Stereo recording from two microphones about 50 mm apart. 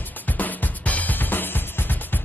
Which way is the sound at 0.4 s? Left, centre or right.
Left.